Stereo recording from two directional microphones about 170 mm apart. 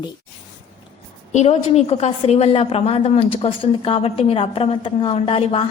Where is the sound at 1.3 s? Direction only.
40° left (ahead or behind).